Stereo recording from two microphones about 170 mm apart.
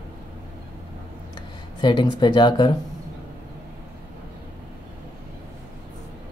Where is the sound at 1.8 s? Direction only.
25° left (ahead or behind).